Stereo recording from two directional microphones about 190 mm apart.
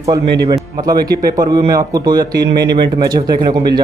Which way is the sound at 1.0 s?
20° right (ahead or behind).